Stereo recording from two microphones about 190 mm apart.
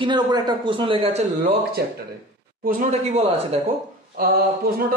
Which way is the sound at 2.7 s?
35° right (ahead or behind).